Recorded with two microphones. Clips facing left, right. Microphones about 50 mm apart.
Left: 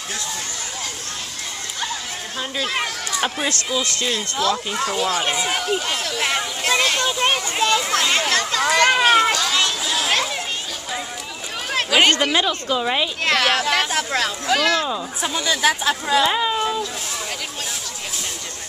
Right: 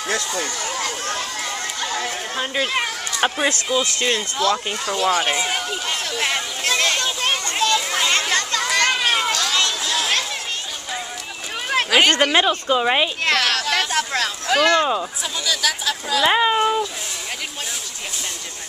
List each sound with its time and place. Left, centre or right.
2.3 s a woman's voice: centre
4.1 s a child's voice: centre
7.9 s children playing: centre
12.1 s a woman's voice: centre
13.2 s a child's voice: centre
15.2 s speech: left
16.3 s a woman's voice: right